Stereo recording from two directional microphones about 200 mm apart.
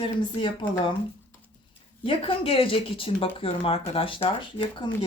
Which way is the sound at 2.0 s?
25° left (ahead or behind).